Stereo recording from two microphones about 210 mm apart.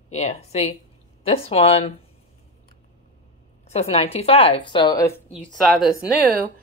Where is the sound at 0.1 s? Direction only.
30° left (ahead or behind).